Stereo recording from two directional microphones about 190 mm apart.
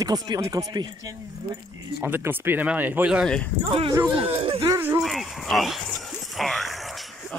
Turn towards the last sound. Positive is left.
turn(degrees=0)  # may be behind; listen again after turning